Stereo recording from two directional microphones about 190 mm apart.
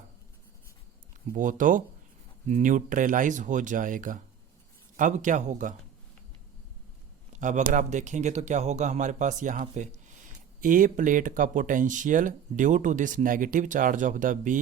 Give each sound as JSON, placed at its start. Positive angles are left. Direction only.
{"t": 1.3, "sound": "speech", "side_deg": -45}
{"t": 7.3, "sound": "speech", "side_deg": -40}